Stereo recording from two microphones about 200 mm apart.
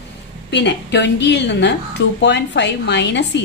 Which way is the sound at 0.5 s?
60° left (ahead or behind).